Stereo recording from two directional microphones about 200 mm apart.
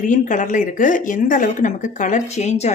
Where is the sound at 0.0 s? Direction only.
40° left (ahead or behind).